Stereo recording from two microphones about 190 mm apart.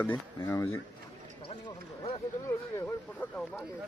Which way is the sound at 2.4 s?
15° left (ahead or behind).